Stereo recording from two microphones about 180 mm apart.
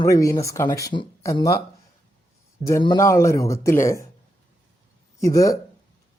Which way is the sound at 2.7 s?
20° left (ahead or behind).